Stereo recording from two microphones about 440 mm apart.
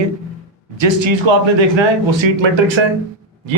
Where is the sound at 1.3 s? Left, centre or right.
Right.